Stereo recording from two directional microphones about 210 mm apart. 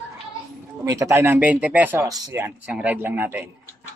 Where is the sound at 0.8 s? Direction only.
15° right (ahead or behind).